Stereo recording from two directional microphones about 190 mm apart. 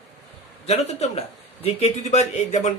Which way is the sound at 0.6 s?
35° left (ahead or behind).